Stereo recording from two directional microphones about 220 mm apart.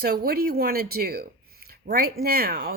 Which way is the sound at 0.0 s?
45° right (ahead or behind).